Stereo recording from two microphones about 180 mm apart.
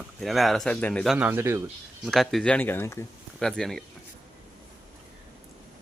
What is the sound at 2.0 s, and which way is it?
Speech, centre (ahead or behind).